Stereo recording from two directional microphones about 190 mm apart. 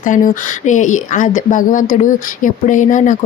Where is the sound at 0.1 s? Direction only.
45° left (ahead or behind).